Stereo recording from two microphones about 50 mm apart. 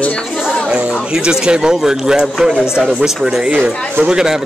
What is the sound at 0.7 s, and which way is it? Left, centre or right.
Speech, centre.